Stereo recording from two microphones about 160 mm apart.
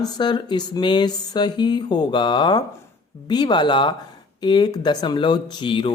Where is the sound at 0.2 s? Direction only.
30° left (ahead or behind).